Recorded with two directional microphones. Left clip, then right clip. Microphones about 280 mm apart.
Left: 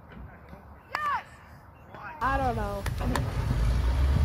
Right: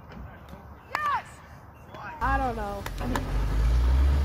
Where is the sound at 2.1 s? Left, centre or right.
Left.